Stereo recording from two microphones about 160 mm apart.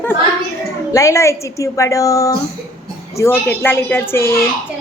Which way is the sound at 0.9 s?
20° left (ahead or behind).